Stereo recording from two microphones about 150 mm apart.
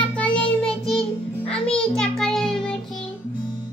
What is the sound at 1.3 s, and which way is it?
Music, 5° left (ahead or behind).